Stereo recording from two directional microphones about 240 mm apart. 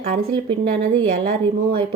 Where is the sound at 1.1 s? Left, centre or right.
Right.